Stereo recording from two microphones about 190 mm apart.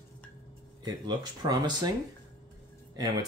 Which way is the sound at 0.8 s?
20° right (ahead or behind).